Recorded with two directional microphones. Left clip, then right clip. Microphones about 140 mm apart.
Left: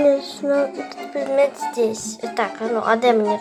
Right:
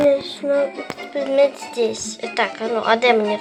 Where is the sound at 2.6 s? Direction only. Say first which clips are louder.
Even; 20° right (ahead or behind).